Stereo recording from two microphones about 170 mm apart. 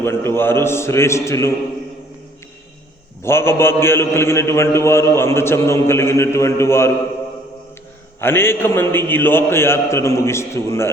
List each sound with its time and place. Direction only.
0.0 s a man's voice: 15° left (ahead or behind)
3.2 s a man's voice: 15° left (ahead or behind)
8.2 s a man's voice: 15° left (ahead or behind)